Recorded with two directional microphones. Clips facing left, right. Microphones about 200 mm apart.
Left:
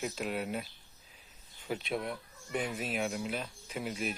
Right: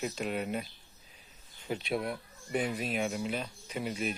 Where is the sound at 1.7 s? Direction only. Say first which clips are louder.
Right 2 dB; centre (ahead or behind).